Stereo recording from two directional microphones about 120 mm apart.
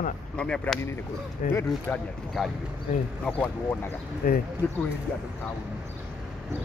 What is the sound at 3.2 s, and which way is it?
Speech, 15° left (ahead or behind).